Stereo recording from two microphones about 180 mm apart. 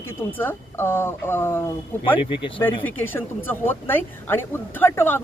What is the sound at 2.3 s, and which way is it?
Speech, 30° left (ahead or behind).